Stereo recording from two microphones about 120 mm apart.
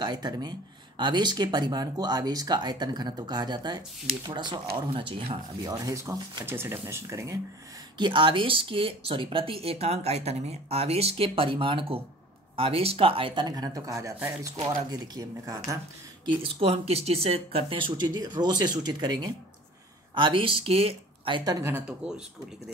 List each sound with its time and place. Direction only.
0.0 s speech: 35° right (ahead or behind)
5.6 s speech: 30° right (ahead or behind)
8.0 s speech: 45° right (ahead or behind)
16.5 s speech: 60° right (ahead or behind)
21.5 s speech: 25° right (ahead or behind)